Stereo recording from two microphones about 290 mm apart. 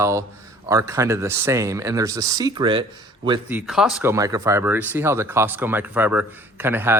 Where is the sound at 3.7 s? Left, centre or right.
Centre.